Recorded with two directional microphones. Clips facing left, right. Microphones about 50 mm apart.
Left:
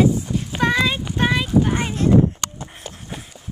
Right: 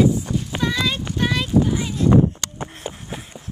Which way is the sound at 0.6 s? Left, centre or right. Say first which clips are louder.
Left 5 dB; left.